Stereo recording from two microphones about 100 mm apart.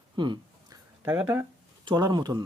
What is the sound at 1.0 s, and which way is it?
Speech, 25° right (ahead or behind).